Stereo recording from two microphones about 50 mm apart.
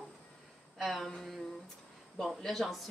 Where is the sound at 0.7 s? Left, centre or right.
Centre.